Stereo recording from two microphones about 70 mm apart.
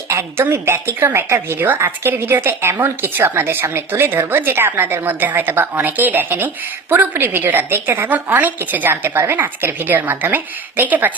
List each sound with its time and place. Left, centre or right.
0.1 s a woman's voice: right